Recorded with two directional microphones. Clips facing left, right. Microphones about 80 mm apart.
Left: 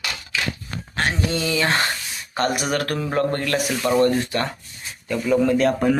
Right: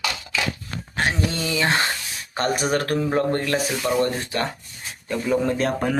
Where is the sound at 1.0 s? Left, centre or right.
Right.